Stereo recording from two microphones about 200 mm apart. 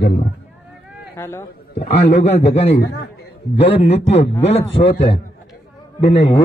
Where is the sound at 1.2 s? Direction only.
10° left (ahead or behind).